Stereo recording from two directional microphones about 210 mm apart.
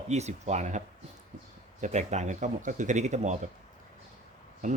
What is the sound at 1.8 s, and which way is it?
Speech, 35° right (ahead or behind).